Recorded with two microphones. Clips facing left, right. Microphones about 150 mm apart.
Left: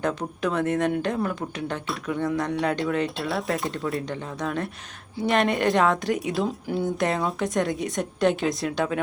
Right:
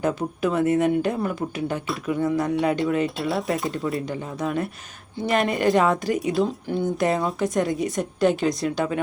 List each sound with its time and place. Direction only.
0.0 s speech: 5° right (ahead or behind)